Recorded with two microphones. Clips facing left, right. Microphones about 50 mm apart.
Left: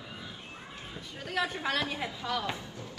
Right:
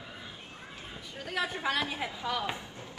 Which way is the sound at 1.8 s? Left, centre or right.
Centre.